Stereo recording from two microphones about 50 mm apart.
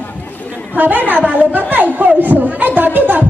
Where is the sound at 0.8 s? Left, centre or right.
Right.